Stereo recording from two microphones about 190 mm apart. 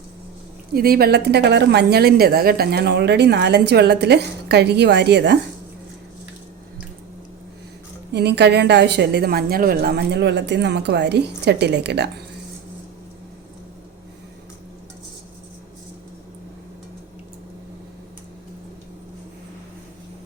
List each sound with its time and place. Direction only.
0.7 s a woman's voice: 50° right (ahead or behind)
8.1 s a woman's voice: 60° right (ahead or behind)